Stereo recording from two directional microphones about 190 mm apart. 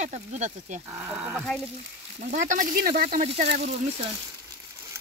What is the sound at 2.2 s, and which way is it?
Speech, 45° right (ahead or behind).